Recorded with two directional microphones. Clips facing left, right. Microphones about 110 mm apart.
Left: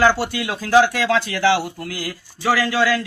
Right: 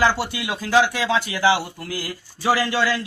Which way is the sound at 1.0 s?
20° right (ahead or behind).